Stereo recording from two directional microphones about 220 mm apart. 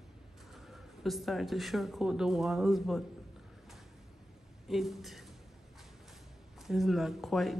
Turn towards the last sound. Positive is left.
turn(degrees=0)  # may be behind; listen again after turning